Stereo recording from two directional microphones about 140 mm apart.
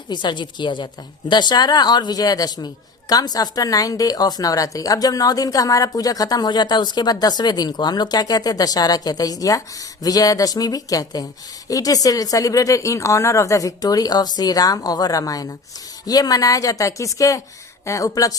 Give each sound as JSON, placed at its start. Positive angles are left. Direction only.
{"t": 0.1, "sound": "a woman's voice", "side_deg": 35}